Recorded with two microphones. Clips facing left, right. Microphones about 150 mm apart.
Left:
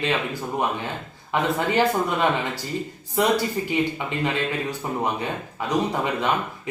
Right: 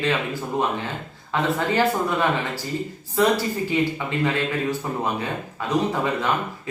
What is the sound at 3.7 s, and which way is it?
Speech, 15° left (ahead or behind).